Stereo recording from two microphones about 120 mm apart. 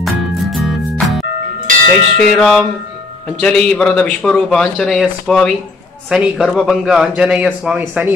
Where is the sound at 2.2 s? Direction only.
5° left (ahead or behind).